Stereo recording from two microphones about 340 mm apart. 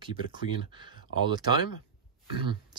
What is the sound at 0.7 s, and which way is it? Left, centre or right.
Speech, centre.